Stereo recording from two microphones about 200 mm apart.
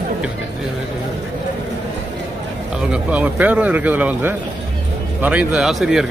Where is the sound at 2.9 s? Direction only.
5° right (ahead or behind).